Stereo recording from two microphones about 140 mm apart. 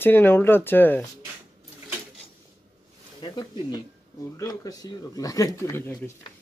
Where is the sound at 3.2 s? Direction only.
30° left (ahead or behind).